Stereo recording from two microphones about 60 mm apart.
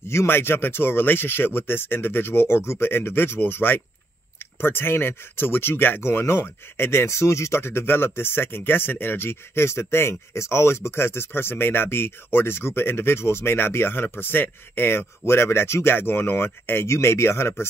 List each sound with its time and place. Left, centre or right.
0.1 s speech: left